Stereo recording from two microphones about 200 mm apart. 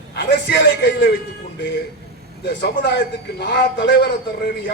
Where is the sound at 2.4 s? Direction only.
60° left (ahead or behind).